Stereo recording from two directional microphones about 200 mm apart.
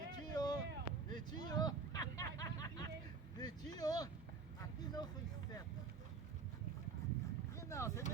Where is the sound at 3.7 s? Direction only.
20° left (ahead or behind).